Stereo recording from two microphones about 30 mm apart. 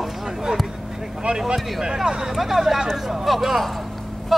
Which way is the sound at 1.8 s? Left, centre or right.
Right.